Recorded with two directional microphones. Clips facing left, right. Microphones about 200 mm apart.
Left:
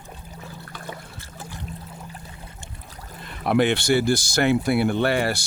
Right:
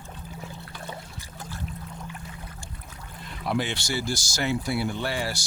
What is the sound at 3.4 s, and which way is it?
Speech, 60° left (ahead or behind).